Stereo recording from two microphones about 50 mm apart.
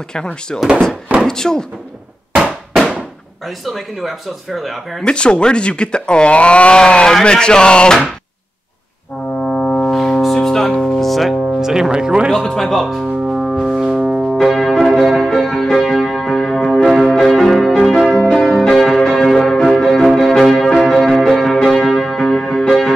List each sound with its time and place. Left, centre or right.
0.1 s speech: centre
3.4 s speech: centre
5.0 s speech: left
9.4 s brass instrument: left
9.8 s foghorn: centre
10.2 s music: centre
11.4 s speech: centre
12.4 s brass instrument: centre
14.3 s music: centre
21.5 s church bell: centre